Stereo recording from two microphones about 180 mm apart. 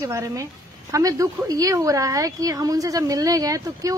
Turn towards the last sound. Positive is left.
turn(degrees=-20)  # may be behind; listen again after turning